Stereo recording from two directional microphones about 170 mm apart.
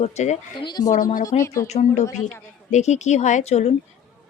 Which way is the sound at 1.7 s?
40° left (ahead or behind).